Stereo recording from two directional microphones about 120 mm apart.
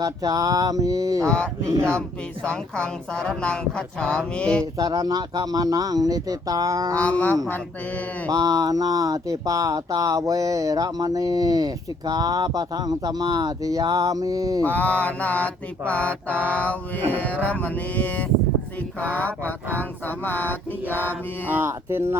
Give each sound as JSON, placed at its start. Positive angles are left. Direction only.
{"t": 0.0, "sound": "a sound", "side_deg": -30}
{"t": 1.2, "sound": "a woman's voice", "side_deg": 5}
{"t": 4.6, "sound": "speech", "side_deg": -30}
{"t": 6.9, "sound": "a woman's voice", "side_deg": 10}
{"t": 8.3, "sound": "speech", "side_deg": -30}
{"t": 14.6, "sound": "a woman's voice", "side_deg": 15}
{"t": 20.1, "sound": "a woman's voice", "side_deg": 15}
{"t": 21.4, "sound": "a sound", "side_deg": -15}